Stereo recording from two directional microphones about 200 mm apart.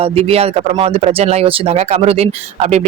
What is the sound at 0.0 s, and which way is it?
Speech, 30° right (ahead or behind).